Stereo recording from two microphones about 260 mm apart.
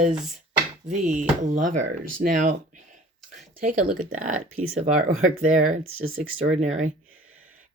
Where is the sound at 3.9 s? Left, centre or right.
Right.